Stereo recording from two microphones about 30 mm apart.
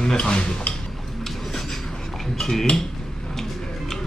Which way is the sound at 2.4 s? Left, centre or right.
Centre.